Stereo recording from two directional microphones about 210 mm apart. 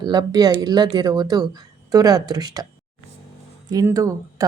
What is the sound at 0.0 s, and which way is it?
Speech, 20° right (ahead or behind).